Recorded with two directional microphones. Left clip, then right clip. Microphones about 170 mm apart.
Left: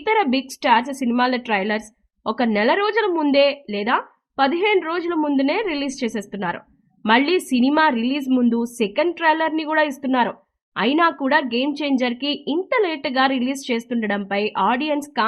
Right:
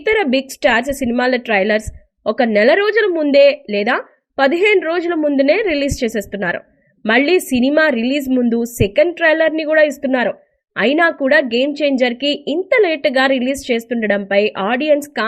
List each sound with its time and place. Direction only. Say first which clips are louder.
0.0 s a woman's voice: right 4 dB; 10° right (ahead or behind)